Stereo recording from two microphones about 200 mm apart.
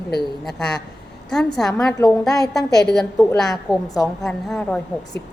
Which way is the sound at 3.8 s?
20° left (ahead or behind).